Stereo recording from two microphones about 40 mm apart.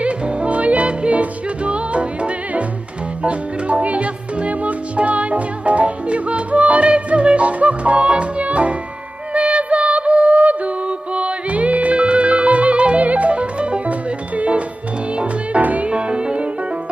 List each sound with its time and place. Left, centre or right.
0.0 s music: right
15.9 s music: right